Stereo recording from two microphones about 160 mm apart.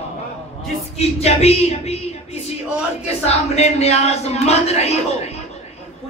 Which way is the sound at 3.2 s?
40° left (ahead or behind).